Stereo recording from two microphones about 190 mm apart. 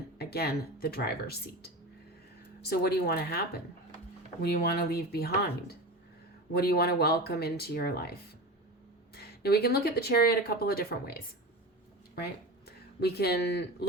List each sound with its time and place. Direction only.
0.2 s speech: 55° left (ahead or behind)
9.1 s speech: 55° left (ahead or behind)
13.0 s speech: 60° left (ahead or behind)